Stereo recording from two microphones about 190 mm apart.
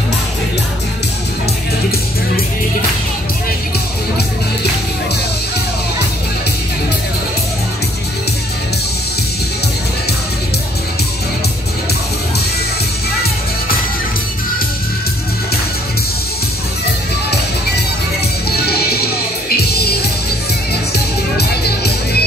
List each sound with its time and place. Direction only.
17.3 s music: 60° left (ahead or behind)